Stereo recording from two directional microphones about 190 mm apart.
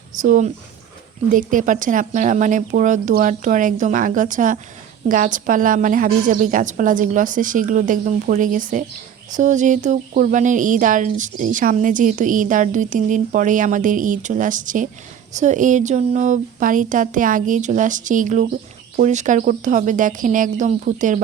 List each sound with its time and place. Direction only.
0.2 s a woman's voice: 40° right (ahead or behind)